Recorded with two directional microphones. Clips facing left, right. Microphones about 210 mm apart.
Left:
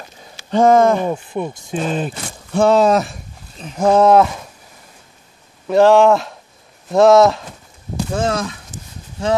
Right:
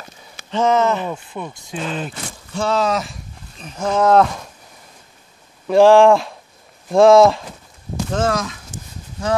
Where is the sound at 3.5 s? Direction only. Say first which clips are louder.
Left 7 dB; 35° left (ahead or behind).